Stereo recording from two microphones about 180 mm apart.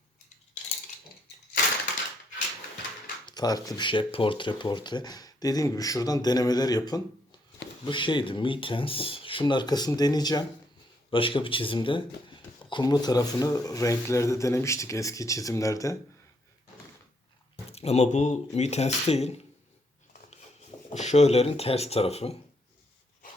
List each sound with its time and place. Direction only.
3.2 s speech: 20° left (ahead or behind)
17.7 s speech: 35° left (ahead or behind)